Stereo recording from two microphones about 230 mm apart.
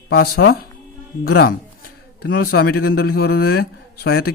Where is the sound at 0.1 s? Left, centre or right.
Left.